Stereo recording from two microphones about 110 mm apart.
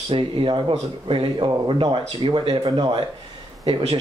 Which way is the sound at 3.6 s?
65° right (ahead or behind).